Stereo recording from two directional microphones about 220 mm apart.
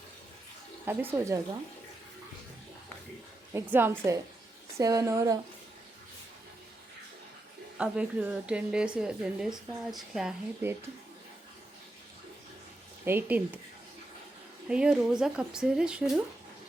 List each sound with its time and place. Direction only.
0.9 s a woman's voice: 10° right (ahead or behind)
3.5 s a woman's voice: 10° right (ahead or behind)
7.8 s a woman's voice: 5° right (ahead or behind)
13.1 s a woman's voice: 10° right (ahead or behind)
14.7 s a woman's voice: 5° right (ahead or behind)